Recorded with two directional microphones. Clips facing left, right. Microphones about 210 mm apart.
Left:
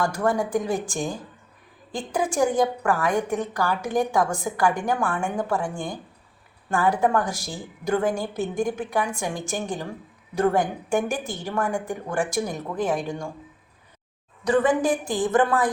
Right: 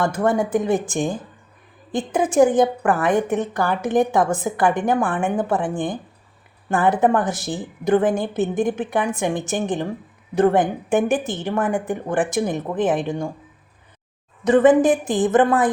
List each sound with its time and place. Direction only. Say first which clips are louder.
0.0 s a woman's voice: right 4 dB; 20° right (ahead or behind)
14.4 s a woman's voice: right 7 dB; 20° right (ahead or behind)